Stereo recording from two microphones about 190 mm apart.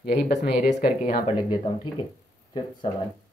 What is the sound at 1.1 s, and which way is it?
Speech, 25° left (ahead or behind).